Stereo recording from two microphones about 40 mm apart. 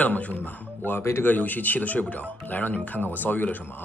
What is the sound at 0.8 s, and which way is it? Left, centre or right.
Speech, left.